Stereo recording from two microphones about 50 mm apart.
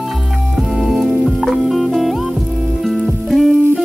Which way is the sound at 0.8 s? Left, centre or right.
Centre.